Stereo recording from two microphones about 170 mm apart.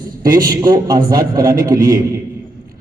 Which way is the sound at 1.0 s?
60° right (ahead or behind).